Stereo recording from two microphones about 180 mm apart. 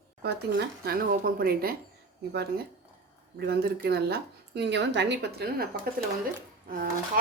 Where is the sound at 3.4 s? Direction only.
60° right (ahead or behind).